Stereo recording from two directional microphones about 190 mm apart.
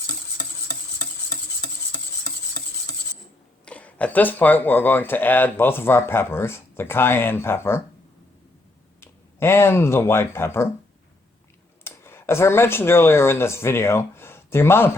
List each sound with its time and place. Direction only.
0.3 s stir: 20° right (ahead or behind)
3.7 s speech: 5° left (ahead or behind)
9.0 s speech: 15° left (ahead or behind)
11.8 s speech: 10° left (ahead or behind)